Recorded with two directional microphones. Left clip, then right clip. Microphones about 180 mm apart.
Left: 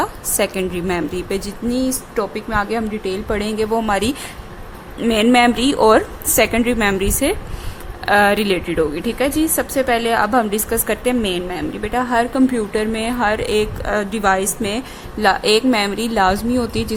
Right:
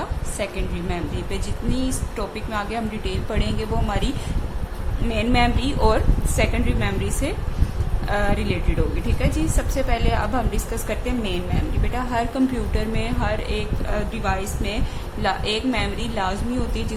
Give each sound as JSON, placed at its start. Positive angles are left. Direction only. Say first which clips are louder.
{"t": 0.0, "sound": "a woman's voice", "louder": "left 9 dB", "side_deg": 60}